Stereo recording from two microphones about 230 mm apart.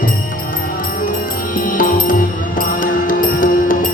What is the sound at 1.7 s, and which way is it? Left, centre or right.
Music, left.